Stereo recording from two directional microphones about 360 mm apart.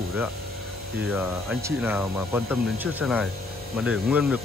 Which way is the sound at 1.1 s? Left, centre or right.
Centre.